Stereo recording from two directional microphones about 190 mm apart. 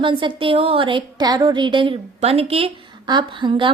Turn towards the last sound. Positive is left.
turn(degrees=-25)  # may be behind; listen again after turning